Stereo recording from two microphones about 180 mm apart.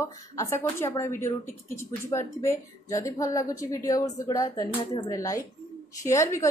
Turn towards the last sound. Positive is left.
turn(degrees=15)  # may be behind; listen again after turning